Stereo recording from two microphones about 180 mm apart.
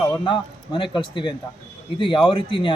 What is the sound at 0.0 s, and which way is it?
A man's voice, 25° left (ahead or behind).